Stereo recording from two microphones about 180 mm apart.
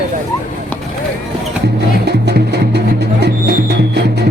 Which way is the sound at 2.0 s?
65° right (ahead or behind).